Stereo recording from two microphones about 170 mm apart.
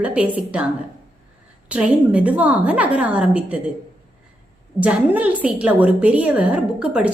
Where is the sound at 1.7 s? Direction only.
10° right (ahead or behind).